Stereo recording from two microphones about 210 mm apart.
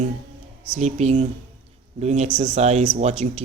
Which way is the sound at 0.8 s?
35° right (ahead or behind).